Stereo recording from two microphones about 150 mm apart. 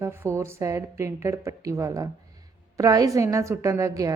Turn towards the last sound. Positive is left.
turn(degrees=-20)  # may be behind; listen again after turning